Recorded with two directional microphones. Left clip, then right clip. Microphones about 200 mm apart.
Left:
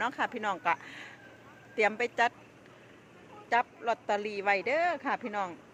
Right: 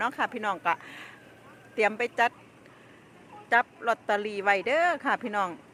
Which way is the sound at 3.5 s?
15° right (ahead or behind).